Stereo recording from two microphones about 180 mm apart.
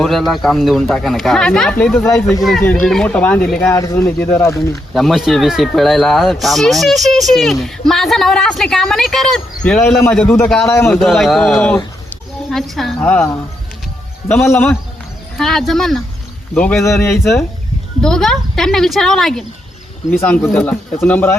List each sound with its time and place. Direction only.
0.0 s speech: centre (ahead or behind)
2.4 s speech: 5° left (ahead or behind)
3.8 s a man's voice: 15° left (ahead or behind)
4.9 s a man's voice: centre (ahead or behind)
10.9 s a man's voice: centre (ahead or behind)
18.0 s a man's voice: 5° left (ahead or behind)